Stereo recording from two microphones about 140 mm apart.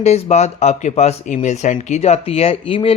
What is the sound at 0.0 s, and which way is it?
Speech, 50° left (ahead or behind).